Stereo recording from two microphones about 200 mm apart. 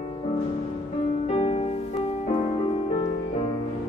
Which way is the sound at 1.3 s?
30° left (ahead or behind).